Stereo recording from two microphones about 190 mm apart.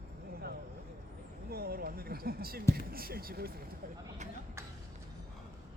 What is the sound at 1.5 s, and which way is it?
Speech, 55° right (ahead or behind).